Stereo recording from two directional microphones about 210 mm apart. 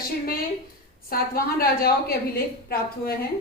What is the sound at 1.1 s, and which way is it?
A woman's voice, 45° left (ahead or behind).